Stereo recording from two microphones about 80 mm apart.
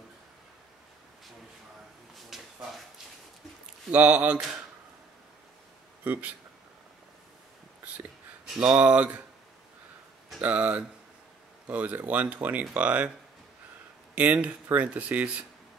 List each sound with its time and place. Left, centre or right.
2.2 s a sound: centre
3.9 s speech: centre
8.5 s speech: centre
10.4 s speech: centre
14.1 s speech: centre